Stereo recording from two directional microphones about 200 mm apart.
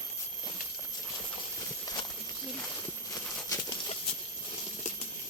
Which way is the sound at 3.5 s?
20° left (ahead or behind).